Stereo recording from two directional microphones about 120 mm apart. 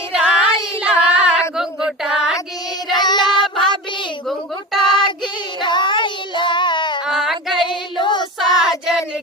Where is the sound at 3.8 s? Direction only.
40° left (ahead or behind).